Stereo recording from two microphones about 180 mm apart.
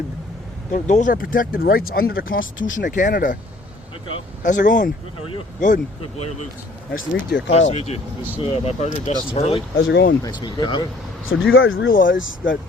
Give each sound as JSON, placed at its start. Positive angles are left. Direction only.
{"t": 0.7, "sound": "speech", "side_deg": 45}
{"t": 4.4, "sound": "speech", "side_deg": 45}
{"t": 6.9, "sound": "speech", "side_deg": 70}
{"t": 7.7, "sound": "speech", "side_deg": 35}
{"t": 9.7, "sound": "speech", "side_deg": 85}
{"t": 10.2, "sound": "speech", "side_deg": 25}
{"t": 11.3, "sound": "speech", "side_deg": 90}
{"t": 11.9, "sound": "speech", "side_deg": 50}
{"t": 12.1, "sound": "speech", "side_deg": 90}